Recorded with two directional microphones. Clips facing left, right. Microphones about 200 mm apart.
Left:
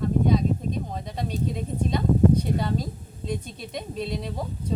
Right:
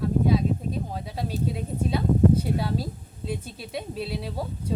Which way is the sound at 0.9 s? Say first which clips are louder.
Even; 5° right (ahead or behind).